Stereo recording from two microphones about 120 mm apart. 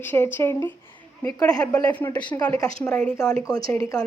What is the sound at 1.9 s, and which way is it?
A woman's voice, 15° left (ahead or behind).